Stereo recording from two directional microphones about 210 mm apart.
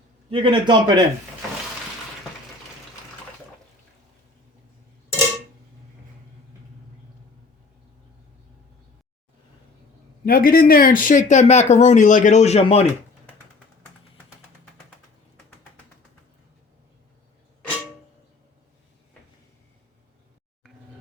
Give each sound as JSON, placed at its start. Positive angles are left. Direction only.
{"t": 0.3, "sound": "a man's voice", "side_deg": -25}
{"t": 10.2, "sound": "speech", "side_deg": 45}